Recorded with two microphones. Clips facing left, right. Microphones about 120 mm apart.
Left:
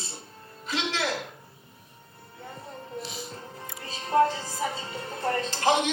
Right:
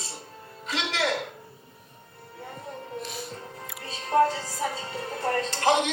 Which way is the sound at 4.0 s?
30° left (ahead or behind).